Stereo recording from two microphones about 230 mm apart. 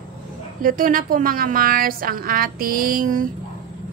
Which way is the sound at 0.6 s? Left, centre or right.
Right.